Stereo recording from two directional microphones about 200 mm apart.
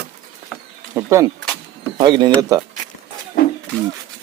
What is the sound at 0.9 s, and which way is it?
Speech, 15° right (ahead or behind).